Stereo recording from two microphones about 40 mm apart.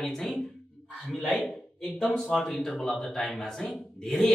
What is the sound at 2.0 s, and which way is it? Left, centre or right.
Speech, centre.